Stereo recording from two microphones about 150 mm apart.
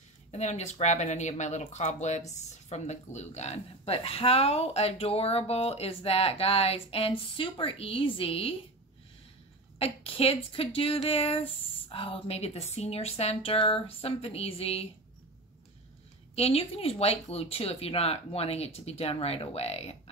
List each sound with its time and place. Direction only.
0.3 s speech: 50° left (ahead or behind)
9.8 s speech: 40° left (ahead or behind)
16.3 s speech: 40° left (ahead or behind)